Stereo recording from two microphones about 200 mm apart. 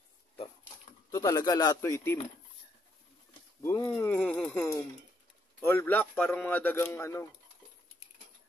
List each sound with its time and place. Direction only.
1.1 s a man's voice: 20° left (ahead or behind)
3.6 s a man's voice: 15° left (ahead or behind)